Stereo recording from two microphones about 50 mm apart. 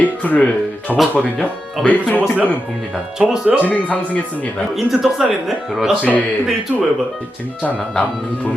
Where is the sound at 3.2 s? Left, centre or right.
Centre.